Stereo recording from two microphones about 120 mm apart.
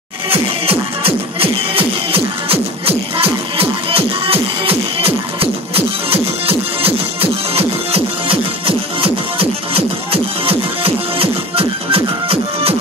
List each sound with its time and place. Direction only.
0.3 s music: 55° right (ahead or behind)